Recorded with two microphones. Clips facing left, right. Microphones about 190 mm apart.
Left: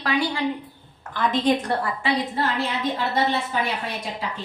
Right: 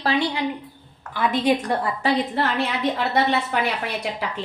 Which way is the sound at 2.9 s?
70° right (ahead or behind).